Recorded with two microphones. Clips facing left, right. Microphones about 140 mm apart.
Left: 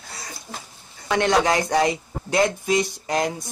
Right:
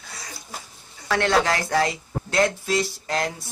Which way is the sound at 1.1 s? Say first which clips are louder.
Left 2 dB; 15° left (ahead or behind).